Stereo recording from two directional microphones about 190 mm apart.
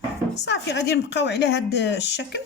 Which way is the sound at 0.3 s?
65° left (ahead or behind).